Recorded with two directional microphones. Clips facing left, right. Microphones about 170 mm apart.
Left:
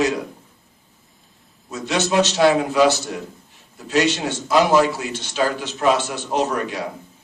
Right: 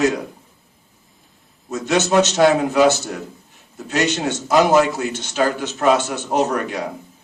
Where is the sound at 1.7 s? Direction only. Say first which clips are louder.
Right 3 dB; 45° right (ahead or behind).